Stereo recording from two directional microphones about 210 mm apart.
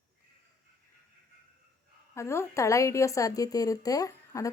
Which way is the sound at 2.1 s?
15° left (ahead or behind).